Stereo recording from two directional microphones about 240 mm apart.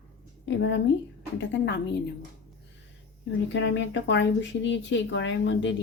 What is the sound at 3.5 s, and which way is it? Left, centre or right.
Speech, left.